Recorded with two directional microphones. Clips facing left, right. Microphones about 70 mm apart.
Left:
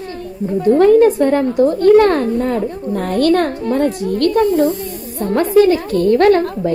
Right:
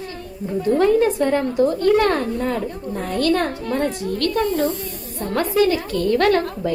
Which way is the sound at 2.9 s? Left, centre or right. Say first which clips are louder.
Left 6 dB; left.